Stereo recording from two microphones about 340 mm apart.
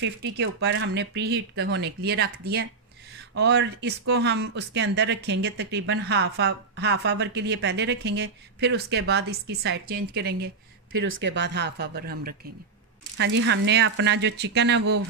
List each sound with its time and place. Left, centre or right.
0.0 s speech: right